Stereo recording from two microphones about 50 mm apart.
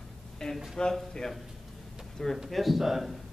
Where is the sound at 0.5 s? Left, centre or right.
Centre.